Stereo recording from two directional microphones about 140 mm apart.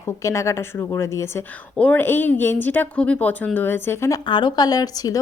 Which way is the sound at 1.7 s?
10° left (ahead or behind).